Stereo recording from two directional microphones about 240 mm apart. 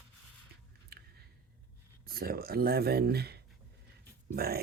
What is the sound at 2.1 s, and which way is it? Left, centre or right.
Speech, right.